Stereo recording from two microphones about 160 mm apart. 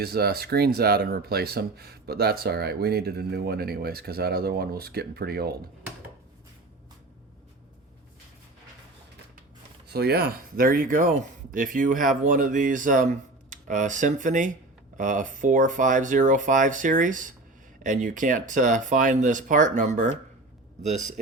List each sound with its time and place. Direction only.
0.0 s speech: 75° right (ahead or behind)
9.9 s speech: 80° right; by 21.2 s 45° right (ahead or behind)